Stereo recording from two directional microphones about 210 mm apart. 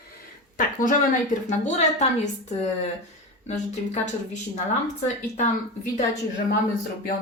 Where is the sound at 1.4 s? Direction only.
35° left (ahead or behind).